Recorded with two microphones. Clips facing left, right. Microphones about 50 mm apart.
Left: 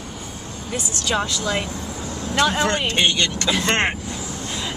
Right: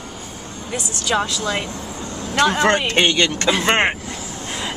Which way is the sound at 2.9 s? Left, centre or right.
Right.